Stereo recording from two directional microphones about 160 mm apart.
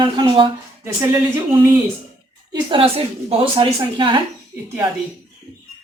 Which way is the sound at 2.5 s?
30° right (ahead or behind).